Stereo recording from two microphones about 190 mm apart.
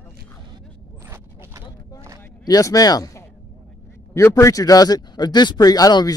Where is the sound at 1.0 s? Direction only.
15° right (ahead or behind).